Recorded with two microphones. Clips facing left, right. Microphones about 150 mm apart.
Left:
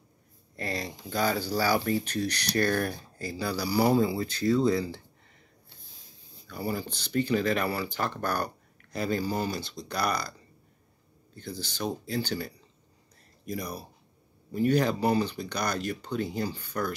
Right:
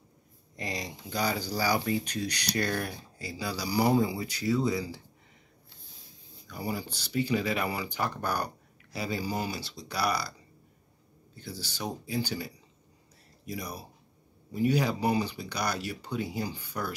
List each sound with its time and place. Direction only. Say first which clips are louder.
0.6 s speech: left 3 dB; 15° right (ahead or behind)
2.6 s speech: left 6 dB; 50° left (ahead or behind)
3.2 s speech: left 3 dB; 15° right (ahead or behind)
6.5 s speech: left 2 dB; 15° right (ahead or behind)
11.3 s speech: left 3 dB; 10° right (ahead or behind)